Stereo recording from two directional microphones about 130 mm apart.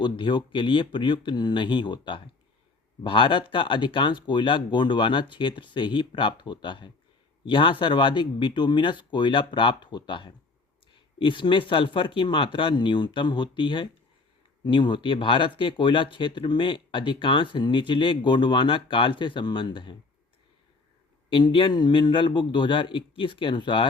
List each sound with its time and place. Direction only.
0.0 s speech: 35° left (ahead or behind)
21.2 s speech: 40° left (ahead or behind)